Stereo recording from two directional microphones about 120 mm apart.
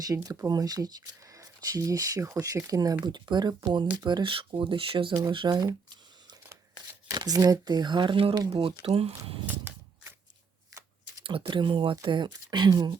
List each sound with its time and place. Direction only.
0.1 s speech: 30° right (ahead or behind)
7.1 s speech: 30° right (ahead or behind)
8.9 s speech: 55° right (ahead or behind)
9.5 s cap gun: 15° right (ahead or behind)
11.2 s speech: 45° right (ahead or behind)